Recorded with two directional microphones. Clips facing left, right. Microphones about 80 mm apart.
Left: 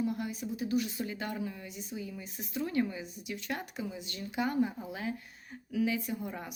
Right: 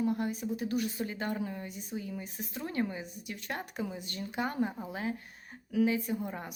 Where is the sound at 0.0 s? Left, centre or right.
Right.